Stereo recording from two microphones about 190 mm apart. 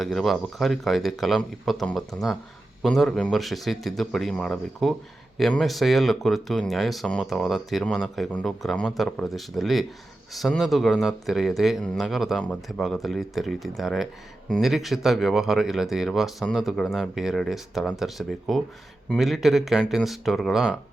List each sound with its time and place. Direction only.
0.0 s speech: centre (ahead or behind)